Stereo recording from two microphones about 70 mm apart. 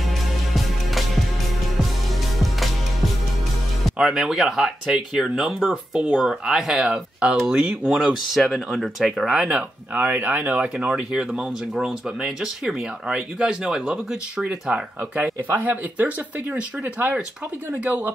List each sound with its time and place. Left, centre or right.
2.3 s music: centre
4.0 s speech: centre
6.8 s speech: centre
7.9 s speech: centre
9.4 s speech: centre
17.8 s speech: right